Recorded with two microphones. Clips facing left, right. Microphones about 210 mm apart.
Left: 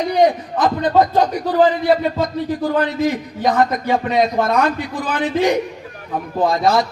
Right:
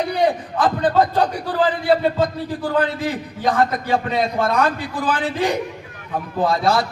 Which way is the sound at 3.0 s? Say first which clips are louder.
Left 4 dB; 30° right (ahead or behind).